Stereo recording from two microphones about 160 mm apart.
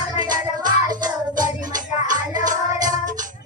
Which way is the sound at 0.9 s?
25° right (ahead or behind).